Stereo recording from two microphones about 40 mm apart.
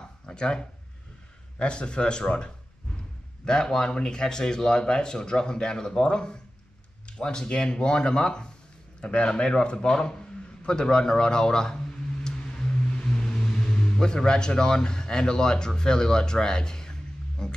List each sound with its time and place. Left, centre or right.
0.3 s speech: left